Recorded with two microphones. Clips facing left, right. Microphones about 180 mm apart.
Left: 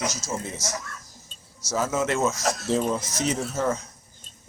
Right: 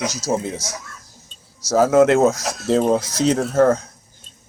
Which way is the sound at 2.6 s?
80° right.